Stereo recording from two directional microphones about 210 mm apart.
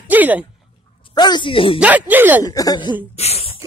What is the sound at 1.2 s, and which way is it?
Speech, 20° left (ahead or behind).